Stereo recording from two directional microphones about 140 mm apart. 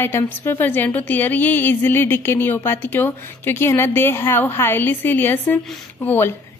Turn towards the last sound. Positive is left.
turn(degrees=15)  # may be behind; listen again after turning